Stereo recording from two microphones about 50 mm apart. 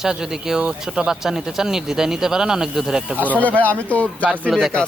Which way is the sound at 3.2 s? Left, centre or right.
Left.